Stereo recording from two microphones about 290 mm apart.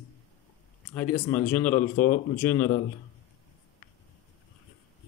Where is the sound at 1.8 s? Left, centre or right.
Left.